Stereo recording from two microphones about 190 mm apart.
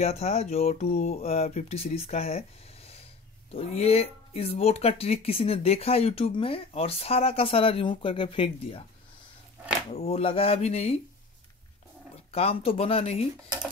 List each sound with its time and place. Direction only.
0.0 s speech: 35° left (ahead or behind)
9.9 s speech: 30° left (ahead or behind)
12.3 s speech: 30° left (ahead or behind)